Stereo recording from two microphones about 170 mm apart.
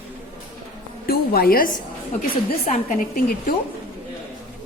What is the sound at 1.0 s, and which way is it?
Speech, 65° left (ahead or behind).